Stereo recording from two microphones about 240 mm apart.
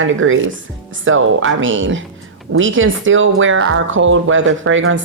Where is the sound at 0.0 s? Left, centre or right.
Right.